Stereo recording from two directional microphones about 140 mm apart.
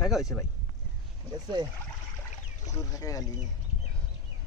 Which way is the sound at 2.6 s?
25° left (ahead or behind).